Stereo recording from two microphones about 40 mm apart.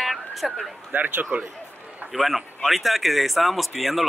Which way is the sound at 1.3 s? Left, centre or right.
Right.